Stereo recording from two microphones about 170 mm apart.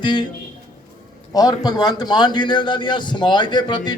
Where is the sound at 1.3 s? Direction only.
25° left (ahead or behind).